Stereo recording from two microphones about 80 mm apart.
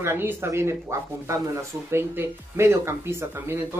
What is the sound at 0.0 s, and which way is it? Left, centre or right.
Speech, right.